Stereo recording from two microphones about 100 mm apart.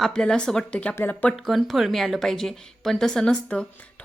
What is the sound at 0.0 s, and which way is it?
A woman's voice, 5° left (ahead or behind).